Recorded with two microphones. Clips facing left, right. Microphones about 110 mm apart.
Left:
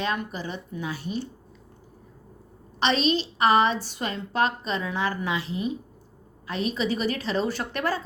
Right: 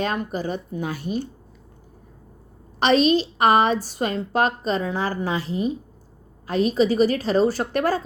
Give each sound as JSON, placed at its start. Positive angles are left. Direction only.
{"t": 0.0, "sound": "a woman's voice", "side_deg": -40}
{"t": 2.8, "sound": "a woman's voice", "side_deg": -45}